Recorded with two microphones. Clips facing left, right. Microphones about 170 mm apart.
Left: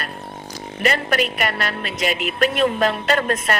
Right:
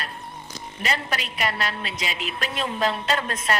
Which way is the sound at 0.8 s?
60° left (ahead or behind).